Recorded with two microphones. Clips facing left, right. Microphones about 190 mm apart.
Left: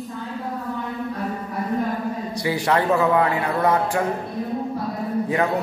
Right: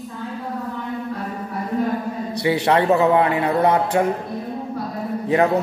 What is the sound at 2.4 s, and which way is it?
A man's voice, 25° right (ahead or behind).